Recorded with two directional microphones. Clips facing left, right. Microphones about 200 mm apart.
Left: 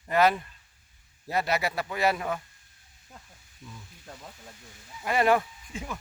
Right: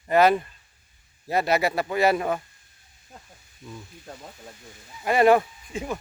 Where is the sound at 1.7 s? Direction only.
35° right (ahead or behind).